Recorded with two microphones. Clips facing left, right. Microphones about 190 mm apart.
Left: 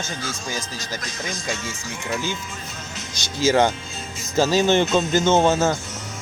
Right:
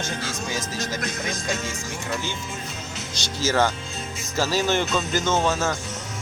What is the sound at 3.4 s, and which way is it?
Speech, 15° left (ahead or behind).